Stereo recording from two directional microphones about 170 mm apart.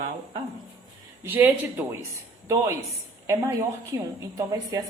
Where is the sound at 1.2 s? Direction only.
10° right (ahead or behind).